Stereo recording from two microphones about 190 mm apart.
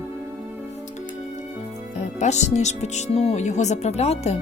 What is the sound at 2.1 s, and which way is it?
Speech, 35° left (ahead or behind).